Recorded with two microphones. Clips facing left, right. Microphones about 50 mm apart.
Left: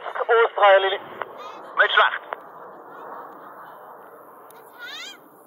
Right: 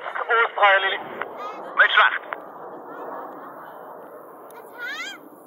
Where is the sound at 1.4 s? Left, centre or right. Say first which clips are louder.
Right 4 dB; right.